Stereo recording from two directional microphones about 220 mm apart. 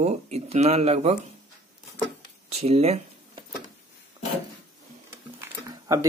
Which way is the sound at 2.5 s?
30° right (ahead or behind).